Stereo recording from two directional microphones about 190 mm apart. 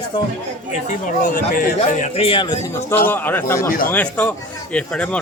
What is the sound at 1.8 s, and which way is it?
Speech, 40° left (ahead or behind).